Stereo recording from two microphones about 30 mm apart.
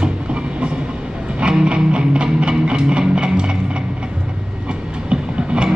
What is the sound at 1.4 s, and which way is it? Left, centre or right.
Music, right.